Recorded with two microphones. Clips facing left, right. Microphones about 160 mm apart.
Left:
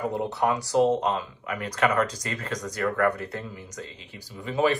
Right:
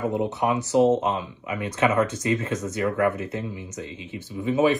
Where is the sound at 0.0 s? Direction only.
20° right (ahead or behind).